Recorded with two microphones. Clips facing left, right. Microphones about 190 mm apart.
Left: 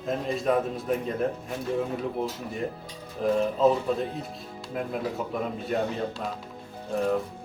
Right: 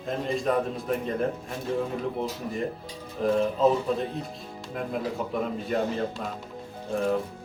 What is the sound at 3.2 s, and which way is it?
Speech, centre (ahead or behind).